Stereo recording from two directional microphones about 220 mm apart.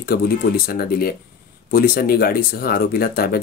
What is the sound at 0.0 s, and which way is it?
Speech, 45° left (ahead or behind).